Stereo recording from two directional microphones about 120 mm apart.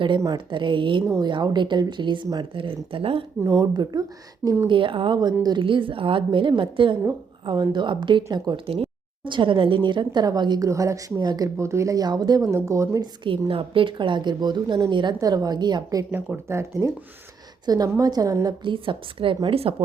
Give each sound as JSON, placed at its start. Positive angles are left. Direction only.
{"t": 0.2, "sound": "speech", "side_deg": -35}
{"t": 3.4, "sound": "speech", "side_deg": -25}
{"t": 4.6, "sound": "speech", "side_deg": -45}
{"t": 8.6, "sound": "speech", "side_deg": -50}
{"t": 10.7, "sound": "speech", "side_deg": -25}
{"t": 11.5, "sound": "speech", "side_deg": -25}
{"t": 13.5, "sound": "speech", "side_deg": -45}
{"t": 16.1, "sound": "speech", "side_deg": -20}
{"t": 18.6, "sound": "speech", "side_deg": -45}